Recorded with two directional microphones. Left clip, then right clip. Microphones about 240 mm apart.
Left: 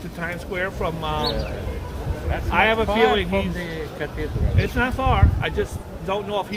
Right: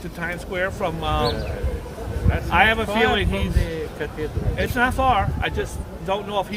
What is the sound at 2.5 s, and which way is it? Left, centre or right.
Speech, right.